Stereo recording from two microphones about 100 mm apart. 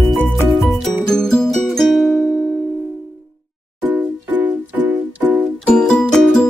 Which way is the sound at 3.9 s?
15° right (ahead or behind).